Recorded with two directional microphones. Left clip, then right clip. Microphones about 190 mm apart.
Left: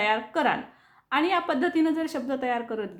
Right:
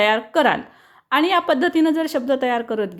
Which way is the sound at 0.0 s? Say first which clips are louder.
Right 8 dB; 40° right (ahead or behind).